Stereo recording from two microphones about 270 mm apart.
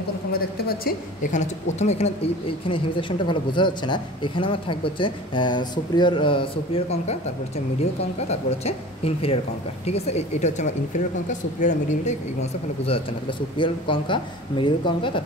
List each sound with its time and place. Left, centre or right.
0.3 s a woman's voice: left
8.3 s a woman's voice: left